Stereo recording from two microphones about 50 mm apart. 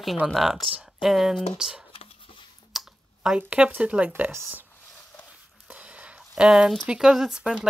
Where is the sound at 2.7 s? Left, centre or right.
Centre.